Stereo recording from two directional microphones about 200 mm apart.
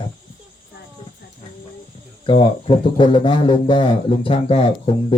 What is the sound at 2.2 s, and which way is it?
Speech, 25° left (ahead or behind).